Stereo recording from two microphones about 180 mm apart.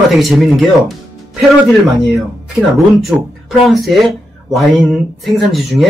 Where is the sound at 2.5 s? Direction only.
5° right (ahead or behind).